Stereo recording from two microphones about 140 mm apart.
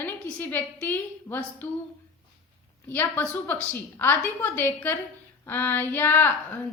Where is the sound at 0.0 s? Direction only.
15° left (ahead or behind).